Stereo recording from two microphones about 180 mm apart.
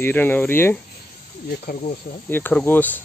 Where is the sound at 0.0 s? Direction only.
10° left (ahead or behind).